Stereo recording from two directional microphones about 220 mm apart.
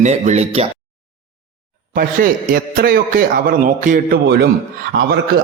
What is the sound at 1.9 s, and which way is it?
A man's voice, 40° right (ahead or behind).